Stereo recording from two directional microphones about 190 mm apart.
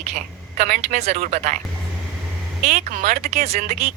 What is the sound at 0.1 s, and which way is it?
Speech, 40° right (ahead or behind).